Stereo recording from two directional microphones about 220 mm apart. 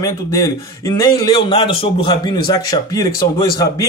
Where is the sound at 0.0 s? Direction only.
15° left (ahead or behind).